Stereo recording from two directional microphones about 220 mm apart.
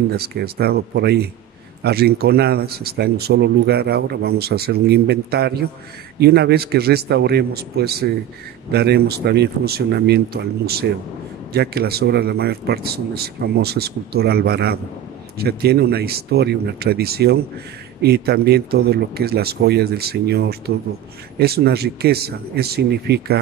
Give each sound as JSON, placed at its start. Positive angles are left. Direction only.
{"t": 0.1, "sound": "speech", "side_deg": -45}